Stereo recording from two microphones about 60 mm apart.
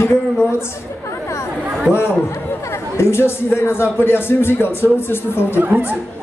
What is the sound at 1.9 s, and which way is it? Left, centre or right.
A man's voice, left.